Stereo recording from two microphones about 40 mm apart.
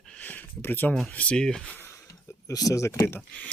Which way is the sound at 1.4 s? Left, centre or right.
Centre.